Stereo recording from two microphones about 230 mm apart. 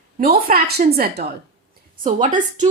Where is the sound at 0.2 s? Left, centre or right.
Right.